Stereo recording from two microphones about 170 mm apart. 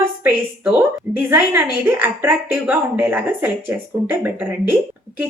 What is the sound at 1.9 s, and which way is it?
Speech, 10° right (ahead or behind).